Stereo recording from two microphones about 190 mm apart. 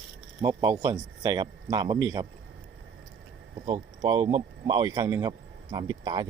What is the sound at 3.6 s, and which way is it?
Speech, 25° right (ahead or behind).